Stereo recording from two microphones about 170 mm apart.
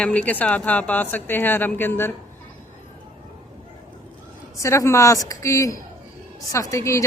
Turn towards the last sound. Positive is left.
turn(degrees=15)  # may be behind; listen again after turning